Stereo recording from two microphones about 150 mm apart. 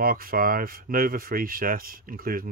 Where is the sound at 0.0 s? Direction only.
70° right (ahead or behind).